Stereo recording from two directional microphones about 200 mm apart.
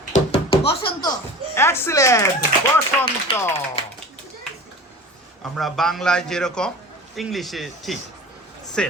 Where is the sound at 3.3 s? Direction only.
25° left (ahead or behind).